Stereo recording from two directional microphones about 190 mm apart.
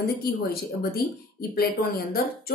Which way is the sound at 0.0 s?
55° left (ahead or behind).